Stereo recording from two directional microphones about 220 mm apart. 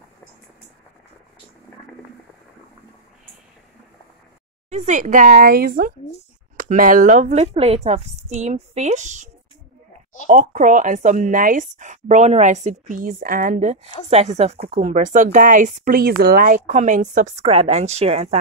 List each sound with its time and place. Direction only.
4.6 s a woman's voice: 30° right (ahead or behind)